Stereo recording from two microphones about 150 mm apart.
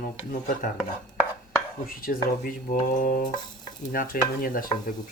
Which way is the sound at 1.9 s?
75° left (ahead or behind).